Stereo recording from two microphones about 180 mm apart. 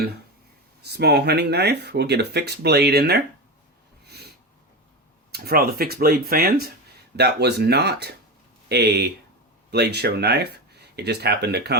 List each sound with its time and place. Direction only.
0.8 s speech: 65° right (ahead or behind)
4.0 s snort: 65° right (ahead or behind)
5.3 s speech: 60° right (ahead or behind)